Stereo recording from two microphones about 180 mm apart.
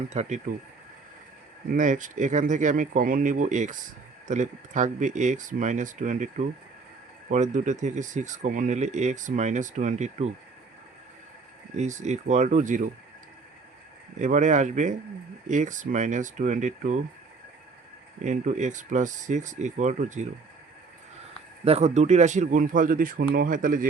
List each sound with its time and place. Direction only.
0.1 s speech: 40° right (ahead or behind)
1.7 s speech: 45° right (ahead or behind)
11.8 s speech: 40° right (ahead or behind)
14.2 s speech: 45° right (ahead or behind)
18.2 s speech: 40° right (ahead or behind)
21.6 s speech: 35° right (ahead or behind)